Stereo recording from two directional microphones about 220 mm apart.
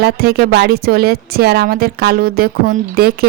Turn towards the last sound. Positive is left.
turn(degrees=-45)  # may be behind; listen again after turning